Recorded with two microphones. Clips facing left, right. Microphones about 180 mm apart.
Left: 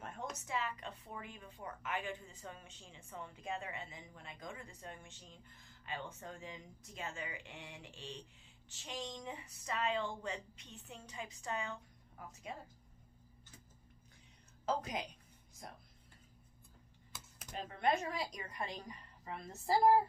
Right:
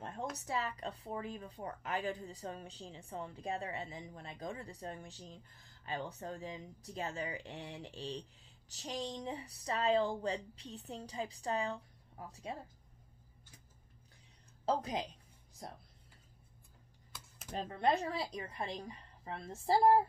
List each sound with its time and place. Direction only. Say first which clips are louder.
0.0 s speech: right 4 dB; 35° right (ahead or behind)
14.7 s speech: right 3 dB; 30° right (ahead or behind)
17.5 s speech: right 2 dB; 35° right (ahead or behind)